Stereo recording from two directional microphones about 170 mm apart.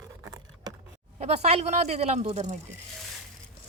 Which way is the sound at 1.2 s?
40° right (ahead or behind).